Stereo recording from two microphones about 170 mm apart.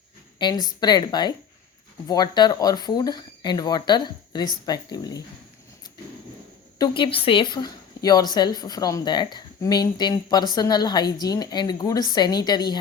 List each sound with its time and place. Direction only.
0.3 s speech: 25° left (ahead or behind)
6.7 s speech: 25° left (ahead or behind)